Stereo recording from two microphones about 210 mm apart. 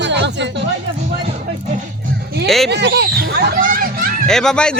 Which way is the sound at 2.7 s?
55° right (ahead or behind).